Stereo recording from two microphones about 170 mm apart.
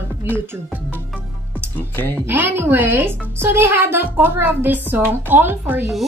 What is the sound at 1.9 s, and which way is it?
Speech, 10° left (ahead or behind).